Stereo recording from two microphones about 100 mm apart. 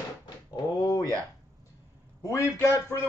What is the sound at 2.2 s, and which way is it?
Speech, 30° left (ahead or behind).